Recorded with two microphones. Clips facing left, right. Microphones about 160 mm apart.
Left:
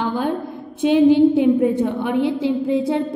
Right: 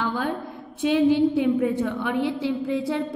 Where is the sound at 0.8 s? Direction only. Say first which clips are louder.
Left 6 dB; 20° left (ahead or behind).